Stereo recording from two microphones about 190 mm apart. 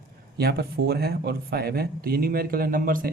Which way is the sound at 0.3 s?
55° right (ahead or behind).